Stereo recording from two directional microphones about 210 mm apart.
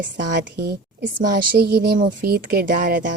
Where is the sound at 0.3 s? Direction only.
50° right (ahead or behind).